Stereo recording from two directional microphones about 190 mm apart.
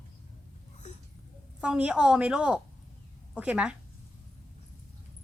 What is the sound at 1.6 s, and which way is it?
A woman's voice, 5° right (ahead or behind).